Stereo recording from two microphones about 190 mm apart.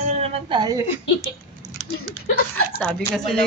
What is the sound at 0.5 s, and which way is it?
Speech, 20° right (ahead or behind).